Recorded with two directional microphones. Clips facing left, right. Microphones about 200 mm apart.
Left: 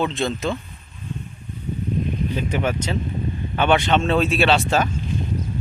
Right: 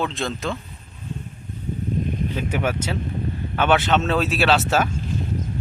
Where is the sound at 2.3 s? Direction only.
10° right (ahead or behind).